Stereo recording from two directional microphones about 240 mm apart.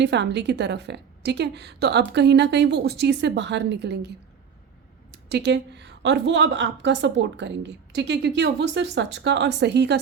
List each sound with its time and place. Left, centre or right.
0.0 s a woman's voice: right
5.1 s a woman's voice: right